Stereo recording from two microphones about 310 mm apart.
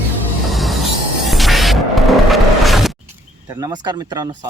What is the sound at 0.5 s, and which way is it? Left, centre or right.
Train wheels squealing, centre.